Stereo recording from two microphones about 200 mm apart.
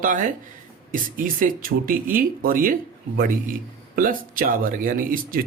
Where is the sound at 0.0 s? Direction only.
45° right (ahead or behind).